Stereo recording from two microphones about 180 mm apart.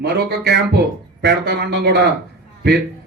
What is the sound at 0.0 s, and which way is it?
A man's voice, 70° right (ahead or behind).